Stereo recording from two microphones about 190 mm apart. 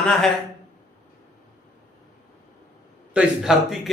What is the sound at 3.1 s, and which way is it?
Speech, 5° right (ahead or behind).